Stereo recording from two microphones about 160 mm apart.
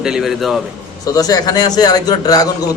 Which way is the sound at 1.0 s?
20° left (ahead or behind).